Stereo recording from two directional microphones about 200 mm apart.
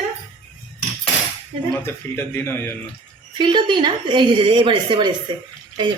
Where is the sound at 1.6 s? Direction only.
10° left (ahead or behind).